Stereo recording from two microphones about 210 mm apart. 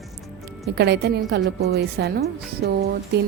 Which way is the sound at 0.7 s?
55° right (ahead or behind).